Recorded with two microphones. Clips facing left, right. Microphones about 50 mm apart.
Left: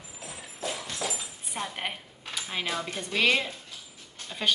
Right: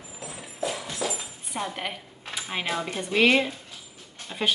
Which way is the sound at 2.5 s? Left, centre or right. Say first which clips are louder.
Right 3 dB; centre.